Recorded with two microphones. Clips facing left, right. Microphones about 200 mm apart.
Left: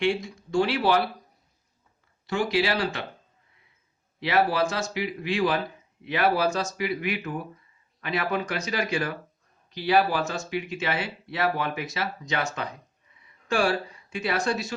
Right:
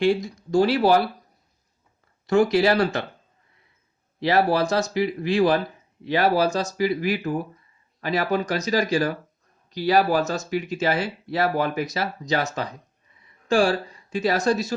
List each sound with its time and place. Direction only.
0.0 s speech: 35° right (ahead or behind)
2.2 s speech: 45° right (ahead or behind)
4.2 s speech: 40° right (ahead or behind)